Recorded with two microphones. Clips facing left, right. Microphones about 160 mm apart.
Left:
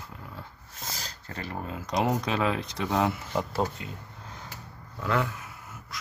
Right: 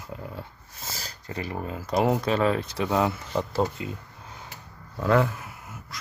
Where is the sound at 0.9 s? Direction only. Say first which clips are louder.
Right 2 dB; 10° right (ahead or behind).